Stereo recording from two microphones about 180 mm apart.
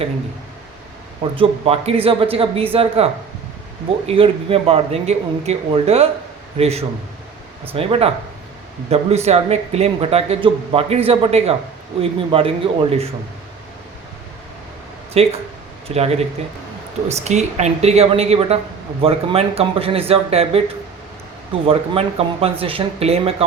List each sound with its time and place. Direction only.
1.4 s speech: 35° right (ahead or behind)
15.1 s speech: 35° right (ahead or behind)
21.7 s speech: 30° right (ahead or behind)